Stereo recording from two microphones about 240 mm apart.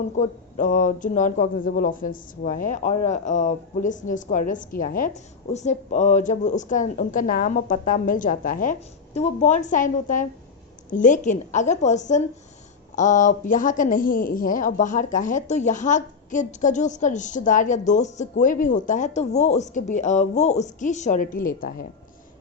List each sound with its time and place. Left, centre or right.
0.2 s a woman's voice: left